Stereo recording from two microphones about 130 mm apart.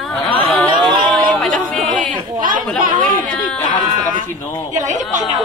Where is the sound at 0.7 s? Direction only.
35° right (ahead or behind).